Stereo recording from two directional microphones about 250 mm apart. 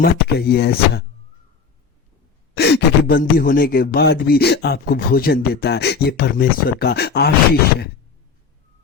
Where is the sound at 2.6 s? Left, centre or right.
Left.